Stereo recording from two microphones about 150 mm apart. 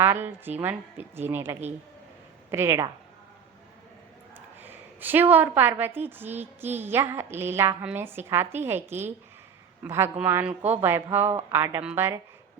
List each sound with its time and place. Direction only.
0.0 s a woman's voice: 15° right (ahead or behind)
4.4 s a woman's voice: 10° right (ahead or behind)